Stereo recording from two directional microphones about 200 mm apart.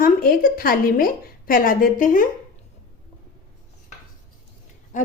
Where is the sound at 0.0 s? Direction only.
45° left (ahead or behind).